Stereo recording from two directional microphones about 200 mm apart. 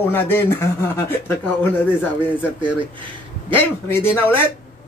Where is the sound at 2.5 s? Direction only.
25° right (ahead or behind).